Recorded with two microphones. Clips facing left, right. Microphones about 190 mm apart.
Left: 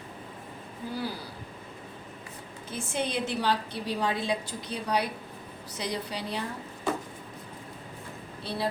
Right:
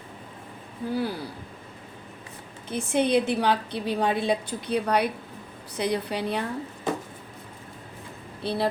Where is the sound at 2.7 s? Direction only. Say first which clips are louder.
Right 9 dB; 60° right (ahead or behind).